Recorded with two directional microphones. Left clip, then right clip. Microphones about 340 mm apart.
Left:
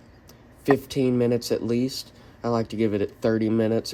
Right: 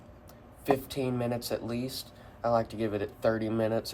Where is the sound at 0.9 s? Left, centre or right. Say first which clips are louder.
Left 9 dB; left.